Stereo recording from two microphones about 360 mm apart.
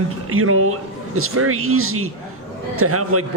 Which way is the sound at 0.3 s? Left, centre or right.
Right.